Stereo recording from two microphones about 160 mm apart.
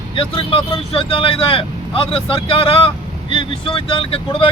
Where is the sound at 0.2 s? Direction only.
35° left (ahead or behind).